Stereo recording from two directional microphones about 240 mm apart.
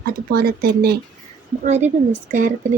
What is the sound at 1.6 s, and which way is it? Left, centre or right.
Speech, right.